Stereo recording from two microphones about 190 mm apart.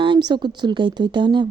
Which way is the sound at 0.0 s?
25° right (ahead or behind).